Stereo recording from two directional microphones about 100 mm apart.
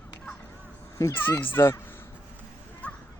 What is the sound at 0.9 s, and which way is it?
Speech, 25° left (ahead or behind).